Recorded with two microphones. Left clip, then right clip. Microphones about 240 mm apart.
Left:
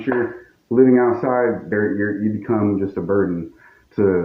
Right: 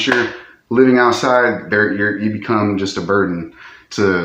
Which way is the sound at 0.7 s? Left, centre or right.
Right.